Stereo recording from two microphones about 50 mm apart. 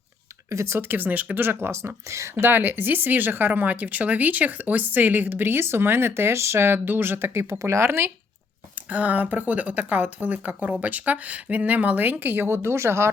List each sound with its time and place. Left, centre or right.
0.5 s speech: right
0.8 s speech: right
1.4 s speech: right
2.0 s a woman's voice: right
2.4 s speech: right
6.7 s speech: right
7.6 s speech: right
8.9 s speech: right
12.5 s speech: right